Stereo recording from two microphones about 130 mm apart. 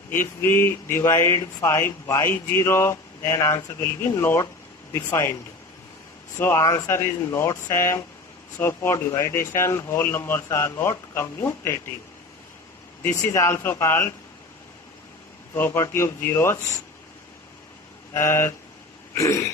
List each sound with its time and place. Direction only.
0.1 s speech: 15° left (ahead or behind)
6.4 s speech: 20° left (ahead or behind)
13.0 s speech: 20° left (ahead or behind)
15.5 s speech: 15° left (ahead or behind)
18.1 s speech: 20° left (ahead or behind)